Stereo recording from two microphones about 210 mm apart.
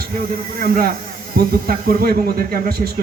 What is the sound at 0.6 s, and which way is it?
Speech, 45° right (ahead or behind).